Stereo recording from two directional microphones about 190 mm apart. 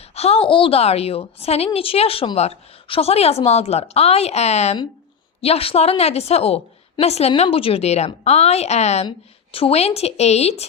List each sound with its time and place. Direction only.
0.1 s a woman's voice: 35° left (ahead or behind)